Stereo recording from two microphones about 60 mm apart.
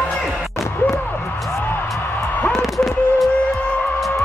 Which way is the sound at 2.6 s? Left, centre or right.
Centre.